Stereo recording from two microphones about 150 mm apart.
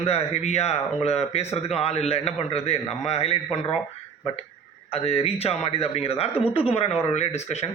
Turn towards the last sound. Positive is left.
turn(degrees=45)  # may be behind; listen again after turning